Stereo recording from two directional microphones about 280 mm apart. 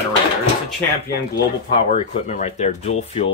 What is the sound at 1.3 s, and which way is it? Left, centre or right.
Speech, centre.